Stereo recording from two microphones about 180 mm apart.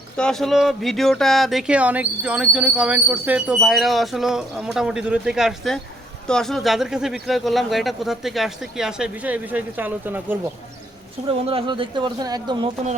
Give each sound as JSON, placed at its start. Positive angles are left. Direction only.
{"t": 0.2, "sound": "speech", "side_deg": 5}
{"t": 11.4, "sound": "a man's voice", "side_deg": -30}